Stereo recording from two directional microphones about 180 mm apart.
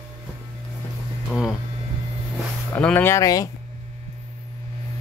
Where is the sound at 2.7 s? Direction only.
10° left (ahead or behind).